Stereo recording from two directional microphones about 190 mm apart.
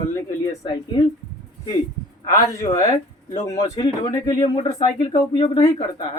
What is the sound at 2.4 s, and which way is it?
Speech, 15° left (ahead or behind).